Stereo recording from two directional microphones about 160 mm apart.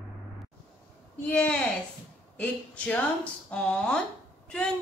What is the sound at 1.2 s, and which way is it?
Speech, 5° left (ahead or behind).